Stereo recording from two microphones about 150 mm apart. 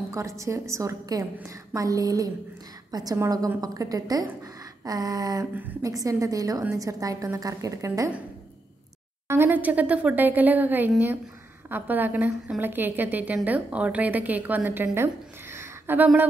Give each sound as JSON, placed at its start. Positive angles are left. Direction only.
{"t": 0.1, "sound": "a woman's voice", "side_deg": -20}
{"t": 5.5, "sound": "a woman's voice", "side_deg": -10}
{"t": 9.3, "sound": "a woman's voice", "side_deg": -15}